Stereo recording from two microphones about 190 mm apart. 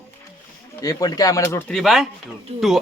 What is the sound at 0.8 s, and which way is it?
Speech, 20° left (ahead or behind).